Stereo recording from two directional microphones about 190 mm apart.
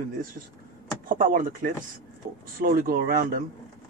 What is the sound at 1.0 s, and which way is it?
Speech, 45° right (ahead or behind).